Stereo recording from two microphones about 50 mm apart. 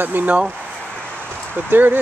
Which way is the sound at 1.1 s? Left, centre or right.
Right.